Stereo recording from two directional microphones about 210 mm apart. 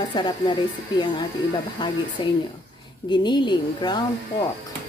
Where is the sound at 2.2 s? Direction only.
20° left (ahead or behind).